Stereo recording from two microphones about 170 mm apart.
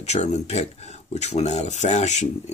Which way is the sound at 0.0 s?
40° left (ahead or behind).